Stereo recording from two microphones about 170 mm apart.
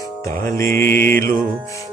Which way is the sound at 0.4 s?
15° left (ahead or behind).